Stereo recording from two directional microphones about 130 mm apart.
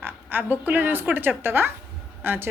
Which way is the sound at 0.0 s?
15° right (ahead or behind).